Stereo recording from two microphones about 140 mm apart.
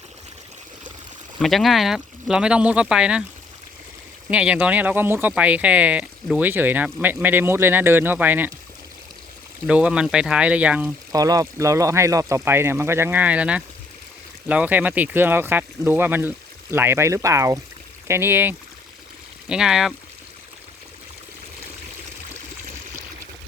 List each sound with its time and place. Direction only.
1.4 s speech: centre (ahead or behind)
4.3 s speech: 10° right (ahead or behind)
9.6 s speech: 10° right (ahead or behind)
11.1 s speech: 25° right (ahead or behind)
19.5 s speech: 5° right (ahead or behind)